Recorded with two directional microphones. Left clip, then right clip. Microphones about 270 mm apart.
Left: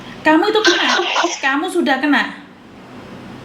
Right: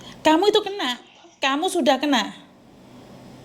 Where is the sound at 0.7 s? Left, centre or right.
Left.